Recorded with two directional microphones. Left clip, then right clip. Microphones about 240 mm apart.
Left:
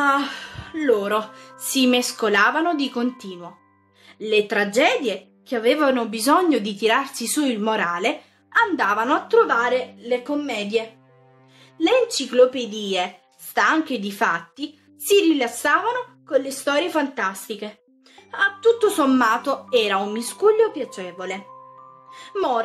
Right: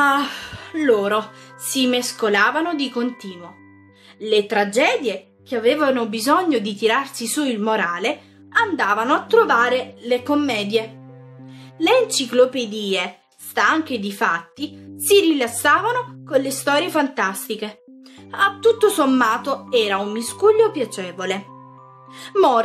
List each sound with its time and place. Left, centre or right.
0.0 s a woman's voice: centre
15.0 s a woman's voice: centre